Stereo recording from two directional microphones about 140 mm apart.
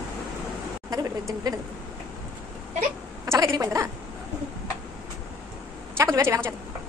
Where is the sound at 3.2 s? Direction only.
25° right (ahead or behind).